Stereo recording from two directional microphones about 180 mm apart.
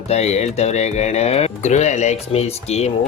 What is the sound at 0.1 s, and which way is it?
Speech, 35° left (ahead or behind).